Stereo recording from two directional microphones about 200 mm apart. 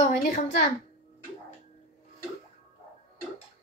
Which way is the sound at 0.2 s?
45° left (ahead or behind).